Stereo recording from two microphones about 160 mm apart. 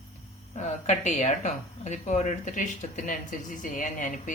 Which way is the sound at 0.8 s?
50° left (ahead or behind).